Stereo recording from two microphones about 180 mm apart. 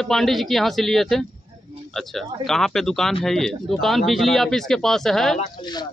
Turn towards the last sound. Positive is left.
turn(degrees=0)  # may be behind; listen again after turning